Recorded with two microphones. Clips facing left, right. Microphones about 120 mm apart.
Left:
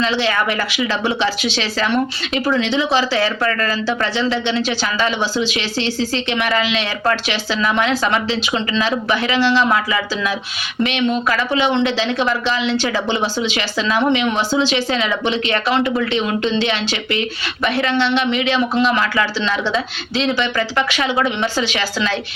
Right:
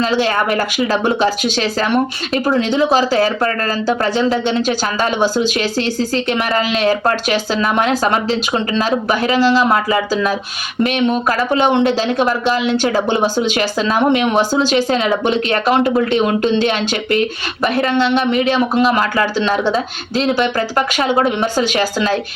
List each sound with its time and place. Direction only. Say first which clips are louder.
0.0 s speech: right 3 dB; 45° right (ahead or behind)